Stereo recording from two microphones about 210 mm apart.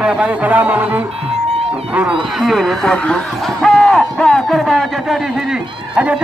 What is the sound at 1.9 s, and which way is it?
Speech, 5° right (ahead or behind).